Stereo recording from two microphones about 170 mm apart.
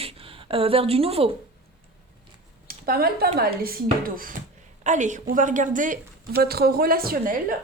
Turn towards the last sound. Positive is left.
turn(degrees=-60)  # may be behind; listen again after turning